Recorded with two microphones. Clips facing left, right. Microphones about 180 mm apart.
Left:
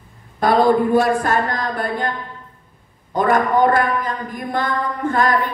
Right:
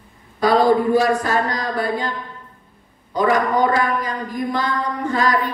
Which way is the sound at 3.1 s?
55° left (ahead or behind).